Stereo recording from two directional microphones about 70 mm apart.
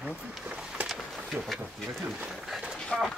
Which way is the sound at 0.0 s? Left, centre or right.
Right.